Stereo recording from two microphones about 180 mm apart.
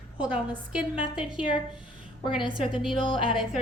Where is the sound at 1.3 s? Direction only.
25° left (ahead or behind).